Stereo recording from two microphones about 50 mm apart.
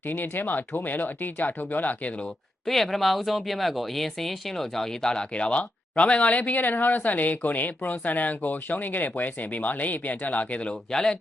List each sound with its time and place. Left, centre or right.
0.0 s speech: left
2.6 s speech: centre